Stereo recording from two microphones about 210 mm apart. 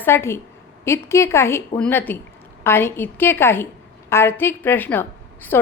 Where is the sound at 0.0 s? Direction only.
10° left (ahead or behind).